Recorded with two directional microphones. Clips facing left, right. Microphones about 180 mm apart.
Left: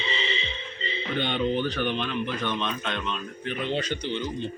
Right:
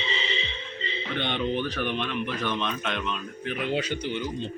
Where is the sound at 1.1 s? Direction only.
Centre (ahead or behind).